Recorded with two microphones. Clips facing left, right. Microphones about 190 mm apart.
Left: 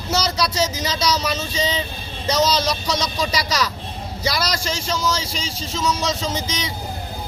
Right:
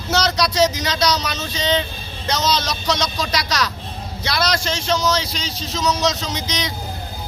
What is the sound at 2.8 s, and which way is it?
Speech, 10° left (ahead or behind).